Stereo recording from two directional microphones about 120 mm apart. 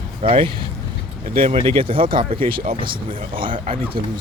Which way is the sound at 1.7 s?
50° right (ahead or behind).